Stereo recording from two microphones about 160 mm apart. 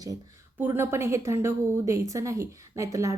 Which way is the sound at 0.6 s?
15° right (ahead or behind).